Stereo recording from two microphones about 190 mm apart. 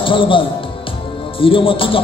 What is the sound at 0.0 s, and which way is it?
A man's voice, 25° left (ahead or behind).